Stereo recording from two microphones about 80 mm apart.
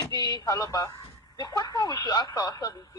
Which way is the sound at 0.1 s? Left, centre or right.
Left.